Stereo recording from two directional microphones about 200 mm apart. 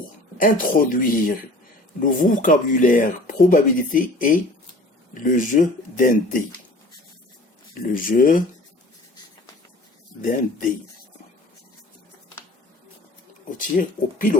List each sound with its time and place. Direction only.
0.0 s speech: 45° left (ahead or behind)
7.9 s speech: 45° left (ahead or behind)
10.2 s speech: 40° left (ahead or behind)
13.6 s speech: 40° left (ahead or behind)